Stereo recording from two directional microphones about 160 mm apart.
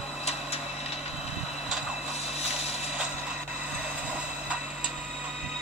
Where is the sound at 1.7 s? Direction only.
5° right (ahead or behind).